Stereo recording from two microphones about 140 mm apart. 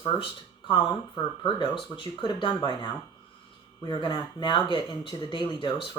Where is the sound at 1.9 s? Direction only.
35° left (ahead or behind).